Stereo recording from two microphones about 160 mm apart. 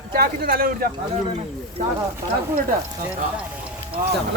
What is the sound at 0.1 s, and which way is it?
Speech, 65° right (ahead or behind).